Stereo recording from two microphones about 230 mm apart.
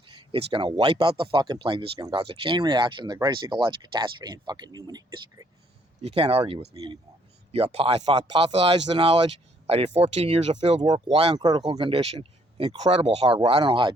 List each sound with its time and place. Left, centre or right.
0.1 s speech: right